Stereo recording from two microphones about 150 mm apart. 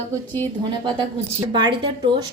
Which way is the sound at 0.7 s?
35° right (ahead or behind).